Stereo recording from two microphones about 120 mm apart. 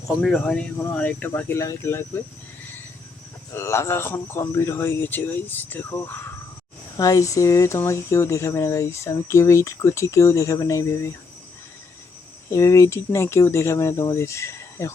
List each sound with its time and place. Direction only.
0.2 s speech: 5° left (ahead or behind); by 2.0 s 20° left (ahead or behind)
3.5 s speech: 25° left (ahead or behind)
6.9 s speech: 30° left (ahead or behind)
12.5 s speech: 25° left (ahead or behind)